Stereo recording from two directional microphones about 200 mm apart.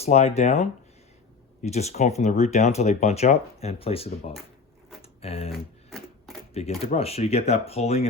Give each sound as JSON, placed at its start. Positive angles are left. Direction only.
{"t": 0.0, "sound": "speech", "side_deg": 30}
{"t": 5.5, "sound": "typewriter", "side_deg": 0}
{"t": 6.5, "sound": "speech", "side_deg": 30}